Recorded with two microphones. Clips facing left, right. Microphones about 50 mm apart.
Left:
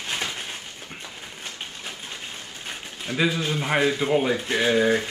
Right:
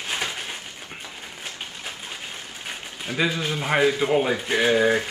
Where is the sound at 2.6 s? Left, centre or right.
Centre.